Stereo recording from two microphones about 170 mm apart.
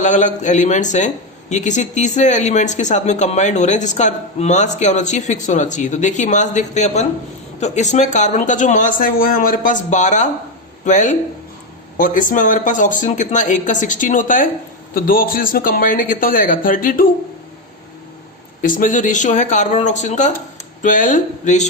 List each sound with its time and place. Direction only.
0.0 s a man's voice: 45° left (ahead or behind)
18.6 s speech: 50° left (ahead or behind)